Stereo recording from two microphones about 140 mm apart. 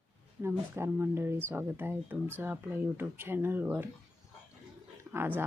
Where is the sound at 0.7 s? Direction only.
15° right (ahead or behind).